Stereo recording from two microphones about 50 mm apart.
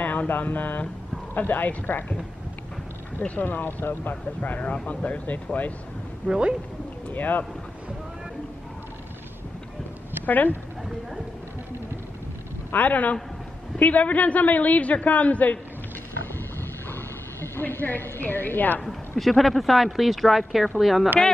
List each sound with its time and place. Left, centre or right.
0.0 s mantra: left
1.3 s a man's voice: left
3.3 s a man's voice: left
6.2 s speech: centre
7.1 s a man's voice: left
10.2 s speech: left
12.7 s a man's voice: left
16.9 s a sound: left
18.2 s a man's voice: left
18.9 s speech: centre